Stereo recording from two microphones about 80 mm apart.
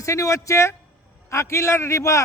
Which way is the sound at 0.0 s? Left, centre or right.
Left.